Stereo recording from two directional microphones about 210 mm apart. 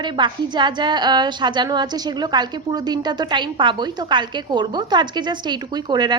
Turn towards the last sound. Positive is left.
turn(degrees=-20)  # may be behind; listen again after turning